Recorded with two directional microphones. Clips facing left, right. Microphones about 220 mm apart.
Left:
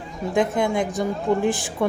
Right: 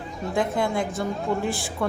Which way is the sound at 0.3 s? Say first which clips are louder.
Left 3 dB; 20° left (ahead or behind).